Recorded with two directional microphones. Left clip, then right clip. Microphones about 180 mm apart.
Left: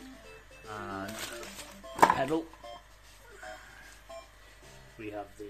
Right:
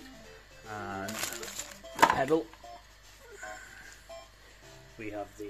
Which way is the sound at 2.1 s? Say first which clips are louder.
Right 3 dB; 10° right (ahead or behind).